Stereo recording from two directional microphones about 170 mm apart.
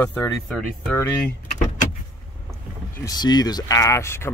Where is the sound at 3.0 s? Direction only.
25° left (ahead or behind).